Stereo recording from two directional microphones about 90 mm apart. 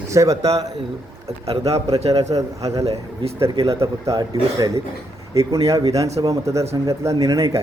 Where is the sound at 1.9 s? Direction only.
40° right (ahead or behind).